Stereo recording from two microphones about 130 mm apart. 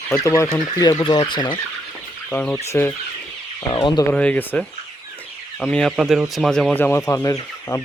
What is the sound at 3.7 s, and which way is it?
Speech, 40° left (ahead or behind).